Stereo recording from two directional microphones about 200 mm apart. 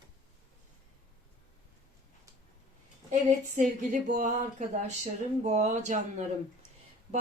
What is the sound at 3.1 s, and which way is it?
Speech, 40° right (ahead or behind).